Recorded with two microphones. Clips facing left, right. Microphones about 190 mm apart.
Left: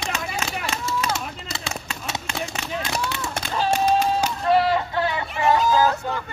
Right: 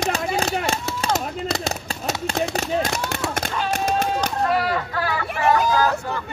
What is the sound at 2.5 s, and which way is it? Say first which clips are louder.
Run: right 5 dB; 40° right (ahead or behind).